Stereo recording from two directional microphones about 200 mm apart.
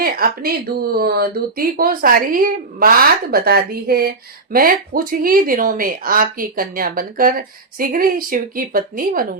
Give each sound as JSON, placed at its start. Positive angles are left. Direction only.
{"t": 0.0, "sound": "speech", "side_deg": -50}